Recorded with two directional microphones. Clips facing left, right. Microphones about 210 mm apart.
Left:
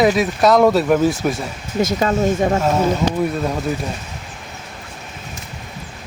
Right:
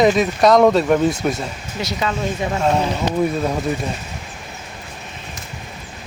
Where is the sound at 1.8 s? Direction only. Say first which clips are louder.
Left 6 dB; 45° left (ahead or behind).